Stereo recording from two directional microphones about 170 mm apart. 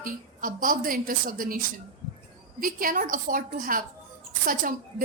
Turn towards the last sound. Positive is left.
turn(degrees=-55)  # may be behind; listen again after turning